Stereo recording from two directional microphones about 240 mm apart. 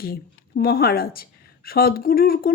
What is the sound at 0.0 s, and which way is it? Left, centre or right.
Speech, left.